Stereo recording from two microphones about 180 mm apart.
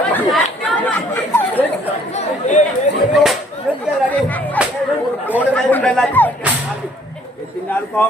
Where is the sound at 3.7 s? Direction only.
10° right (ahead or behind).